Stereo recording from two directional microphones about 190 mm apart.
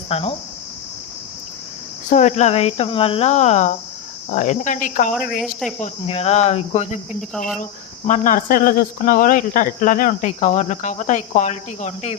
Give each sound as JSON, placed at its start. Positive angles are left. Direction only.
{"t": 0.1, "sound": "speech", "side_deg": 30}
{"t": 2.0, "sound": "speech", "side_deg": 40}
{"t": 5.4, "sound": "cricket", "side_deg": 0}
{"t": 5.8, "sound": "speech", "side_deg": 35}
{"t": 7.2, "sound": "cricket", "side_deg": 5}
{"t": 7.6, "sound": "speech", "side_deg": 40}